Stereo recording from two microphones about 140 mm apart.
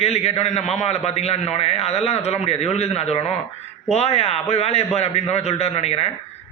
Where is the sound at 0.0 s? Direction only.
45° left (ahead or behind).